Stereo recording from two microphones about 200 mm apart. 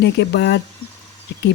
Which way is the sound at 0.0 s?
60° left (ahead or behind).